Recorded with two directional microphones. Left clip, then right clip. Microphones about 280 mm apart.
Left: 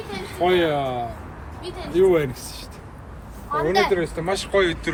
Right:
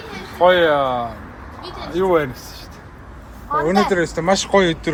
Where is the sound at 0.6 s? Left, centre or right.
Centre.